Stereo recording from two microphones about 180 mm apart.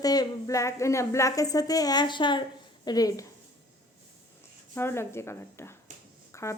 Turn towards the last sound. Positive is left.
turn(degrees=15)  # may be behind; listen again after turning